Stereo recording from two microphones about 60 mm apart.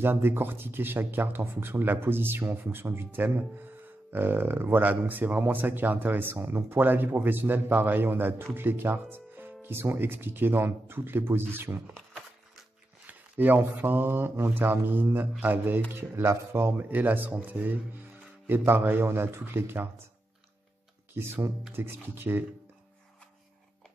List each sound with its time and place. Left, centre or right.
0.0 s speech: right
13.0 s speech: right
21.1 s speech: right